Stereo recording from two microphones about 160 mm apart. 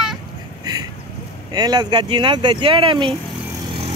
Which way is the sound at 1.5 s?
25° right (ahead or behind).